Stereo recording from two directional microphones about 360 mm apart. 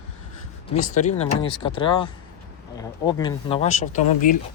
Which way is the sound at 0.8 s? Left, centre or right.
Centre.